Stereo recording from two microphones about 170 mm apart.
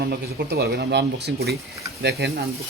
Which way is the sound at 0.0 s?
70° right (ahead or behind).